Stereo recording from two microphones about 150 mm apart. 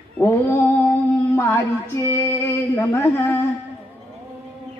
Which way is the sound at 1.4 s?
15° left (ahead or behind).